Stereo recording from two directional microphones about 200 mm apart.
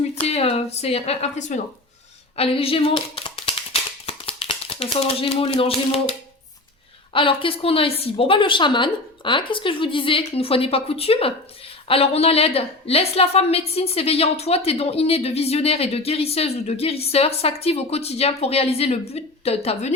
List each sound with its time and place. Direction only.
0.2 s a woman's voice: 30° left (ahead or behind)
2.3 s a sound: 30° left (ahead or behind)
7.1 s a woman's voice: 25° left (ahead or behind)